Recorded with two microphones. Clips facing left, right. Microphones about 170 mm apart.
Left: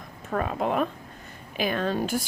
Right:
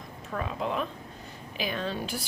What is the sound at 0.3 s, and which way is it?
Speech, 55° left (ahead or behind).